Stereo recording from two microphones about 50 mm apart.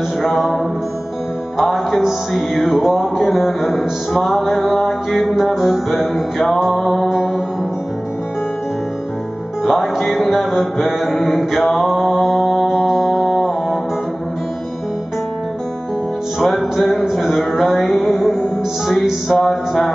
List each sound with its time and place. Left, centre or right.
0.2 s music: centre
1.6 s music: centre
7.1 s mantra: centre
9.7 s music: centre
16.3 s music: centre